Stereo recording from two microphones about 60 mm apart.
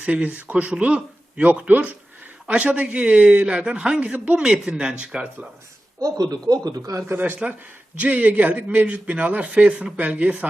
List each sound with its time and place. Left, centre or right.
0.0 s a man's voice: right
6.1 s a man's voice: right
7.4 s a man's voice: right